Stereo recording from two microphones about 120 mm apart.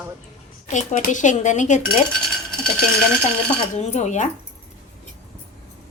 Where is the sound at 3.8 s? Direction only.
75° left (ahead or behind); by 4.3 s 90° left.